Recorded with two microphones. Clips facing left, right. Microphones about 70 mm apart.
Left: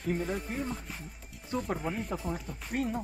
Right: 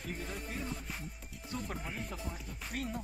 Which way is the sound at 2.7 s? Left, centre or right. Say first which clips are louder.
Left 8 dB; left.